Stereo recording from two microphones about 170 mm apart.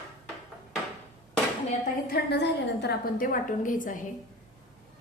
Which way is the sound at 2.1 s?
80° left.